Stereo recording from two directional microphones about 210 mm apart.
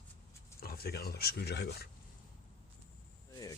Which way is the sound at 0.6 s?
45° left (ahead or behind).